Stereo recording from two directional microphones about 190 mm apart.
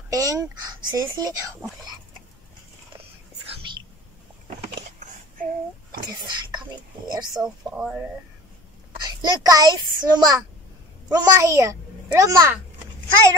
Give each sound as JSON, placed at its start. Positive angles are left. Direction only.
{"t": 0.1, "sound": "speech", "side_deg": -15}
{"t": 7.1, "sound": "speech", "side_deg": -20}
{"t": 9.0, "sound": "a child's voice", "side_deg": -20}